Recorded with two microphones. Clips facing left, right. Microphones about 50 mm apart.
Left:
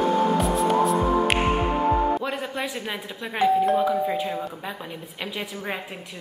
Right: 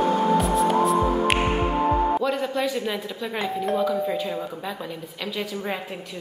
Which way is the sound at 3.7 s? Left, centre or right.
Centre.